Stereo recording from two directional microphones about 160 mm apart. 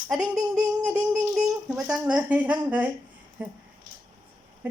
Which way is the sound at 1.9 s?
5° right (ahead or behind).